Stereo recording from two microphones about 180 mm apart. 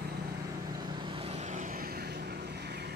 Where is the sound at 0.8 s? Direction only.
25° right (ahead or behind).